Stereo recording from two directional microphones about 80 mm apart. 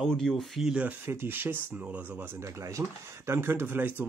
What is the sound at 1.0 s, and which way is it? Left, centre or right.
Speech, right.